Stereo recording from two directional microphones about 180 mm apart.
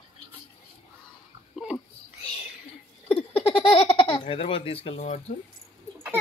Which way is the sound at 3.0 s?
30° left (ahead or behind).